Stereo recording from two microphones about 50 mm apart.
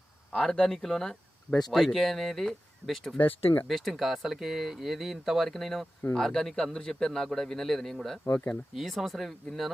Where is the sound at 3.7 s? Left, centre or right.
Centre.